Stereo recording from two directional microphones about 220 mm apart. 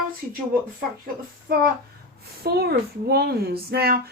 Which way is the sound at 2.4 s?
45° right (ahead or behind).